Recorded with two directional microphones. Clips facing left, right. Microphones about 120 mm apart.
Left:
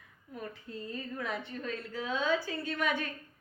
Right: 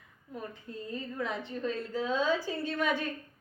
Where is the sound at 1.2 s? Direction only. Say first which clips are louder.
Right 3 dB; 20° right (ahead or behind).